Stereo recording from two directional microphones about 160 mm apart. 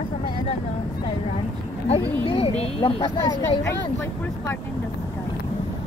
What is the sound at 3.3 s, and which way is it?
Speech, 20° left (ahead or behind).